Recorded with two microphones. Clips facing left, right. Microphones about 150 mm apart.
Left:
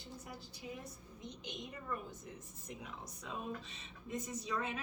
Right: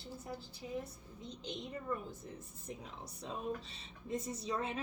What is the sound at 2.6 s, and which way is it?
A woman's voice, 30° right (ahead or behind).